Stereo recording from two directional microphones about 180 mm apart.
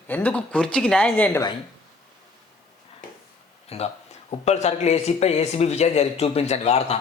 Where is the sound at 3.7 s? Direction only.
35° left (ahead or behind).